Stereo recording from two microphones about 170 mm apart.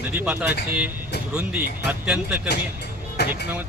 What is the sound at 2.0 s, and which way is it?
Speech, 5° right (ahead or behind).